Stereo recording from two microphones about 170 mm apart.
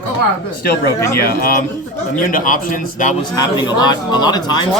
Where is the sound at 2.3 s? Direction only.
50° left (ahead or behind).